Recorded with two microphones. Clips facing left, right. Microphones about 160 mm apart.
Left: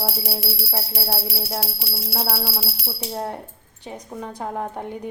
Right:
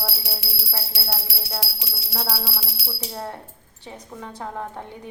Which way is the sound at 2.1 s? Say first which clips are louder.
Left 3 dB; 15° left (ahead or behind).